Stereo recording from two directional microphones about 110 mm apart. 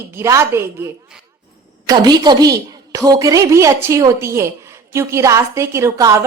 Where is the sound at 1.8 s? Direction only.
35° right (ahead or behind).